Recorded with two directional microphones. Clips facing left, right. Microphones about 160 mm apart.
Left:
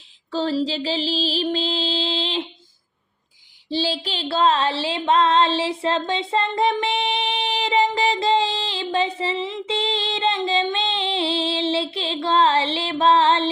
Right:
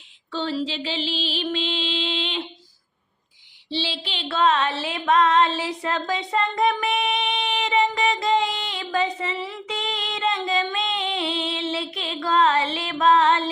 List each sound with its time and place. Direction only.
0.3 s mantra: 35° left (ahead or behind)
3.7 s child singing: 45° left (ahead or behind)